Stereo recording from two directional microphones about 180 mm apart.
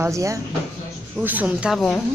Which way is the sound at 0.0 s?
15° right (ahead or behind).